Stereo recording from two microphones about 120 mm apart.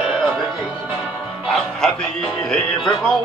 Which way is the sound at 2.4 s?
5° left (ahead or behind).